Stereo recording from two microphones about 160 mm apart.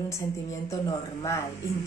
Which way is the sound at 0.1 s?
20° left (ahead or behind).